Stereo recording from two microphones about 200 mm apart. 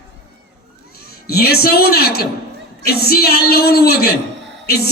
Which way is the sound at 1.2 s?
50° left (ahead or behind).